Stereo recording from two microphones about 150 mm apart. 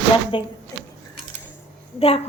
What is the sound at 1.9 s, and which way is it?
Speech, 40° left (ahead or behind).